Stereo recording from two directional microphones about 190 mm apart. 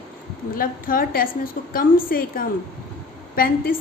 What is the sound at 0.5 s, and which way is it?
A woman's voice, 50° left (ahead or behind).